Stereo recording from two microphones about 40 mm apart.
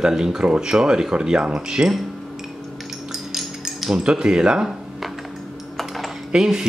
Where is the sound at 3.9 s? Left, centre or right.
Centre.